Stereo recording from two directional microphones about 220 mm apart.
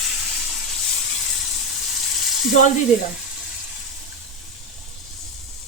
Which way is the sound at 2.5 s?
35° left (ahead or behind).